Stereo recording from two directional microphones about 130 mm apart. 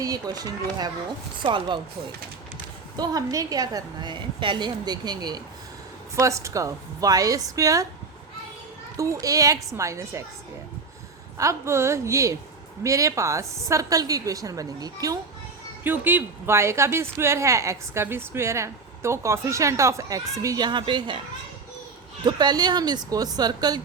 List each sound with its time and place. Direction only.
0.0 s a woman's voice: 30° right (ahead or behind)
2.9 s a woman's voice: 30° right (ahead or behind)
9.0 s a woman's voice: 25° right (ahead or behind)
11.3 s a woman's voice: 20° right (ahead or behind)
15.8 s a woman's voice: 15° right (ahead or behind)
20.7 s a woman's voice: 35° right (ahead or behind)
22.2 s a woman's voice: 35° right (ahead or behind)